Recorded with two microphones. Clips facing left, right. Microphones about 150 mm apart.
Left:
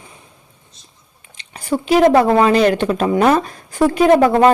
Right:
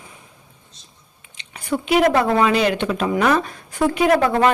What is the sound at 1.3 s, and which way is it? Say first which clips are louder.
Speech: left 3 dB; 35° left (ahead or behind).